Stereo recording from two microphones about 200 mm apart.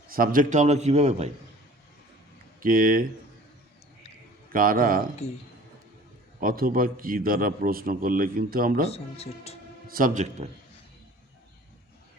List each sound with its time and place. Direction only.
0.1 s a man's voice: 45° right (ahead or behind)
2.6 s a man's voice: 45° right (ahead or behind)
4.5 s a man's voice: 45° right (ahead or behind)
6.4 s a man's voice: 45° right (ahead or behind)
8.9 s speech: 30° left (ahead or behind)
9.9 s a man's voice: 40° right (ahead or behind)